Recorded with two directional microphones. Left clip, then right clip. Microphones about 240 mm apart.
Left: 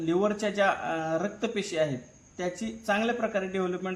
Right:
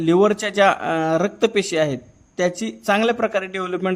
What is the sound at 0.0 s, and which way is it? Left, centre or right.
Speech, right.